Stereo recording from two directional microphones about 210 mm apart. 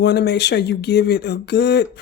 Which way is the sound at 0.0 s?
50° left (ahead or behind).